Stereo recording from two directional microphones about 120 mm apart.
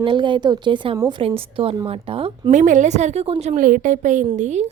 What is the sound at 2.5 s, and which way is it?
A woman's voice, 90° right.